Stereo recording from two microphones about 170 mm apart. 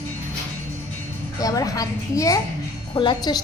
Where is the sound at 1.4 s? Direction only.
20° left (ahead or behind).